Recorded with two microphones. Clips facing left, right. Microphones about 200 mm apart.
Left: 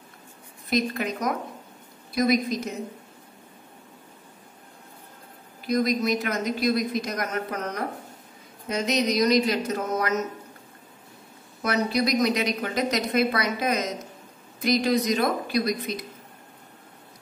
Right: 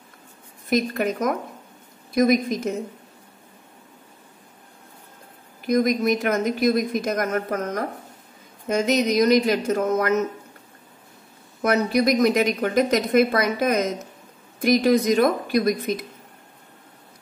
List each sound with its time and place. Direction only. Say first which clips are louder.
0.7 s a woman's voice: right 4 dB; 50° right (ahead or behind)
5.7 s a woman's voice: right 4 dB; 50° right (ahead or behind)
11.6 s a woman's voice: right 5 dB; 50° right (ahead or behind)